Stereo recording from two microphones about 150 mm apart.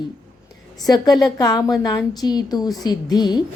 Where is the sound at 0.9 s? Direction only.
25° left (ahead or behind).